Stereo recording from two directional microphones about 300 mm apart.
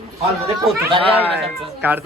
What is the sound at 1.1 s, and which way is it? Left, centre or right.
Speech, centre.